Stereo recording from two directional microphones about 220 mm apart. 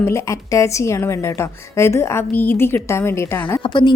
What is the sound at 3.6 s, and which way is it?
Speech, 20° left (ahead or behind).